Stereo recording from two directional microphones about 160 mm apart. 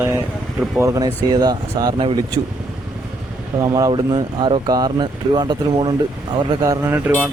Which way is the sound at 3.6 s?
20° right (ahead or behind).